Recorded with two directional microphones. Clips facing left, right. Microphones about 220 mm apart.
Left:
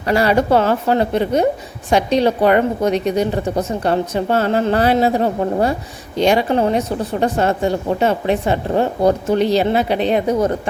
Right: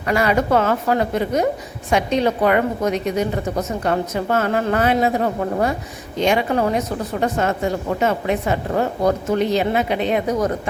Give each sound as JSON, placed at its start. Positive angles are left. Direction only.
{"t": 0.1, "sound": "a woman's voice", "side_deg": 30}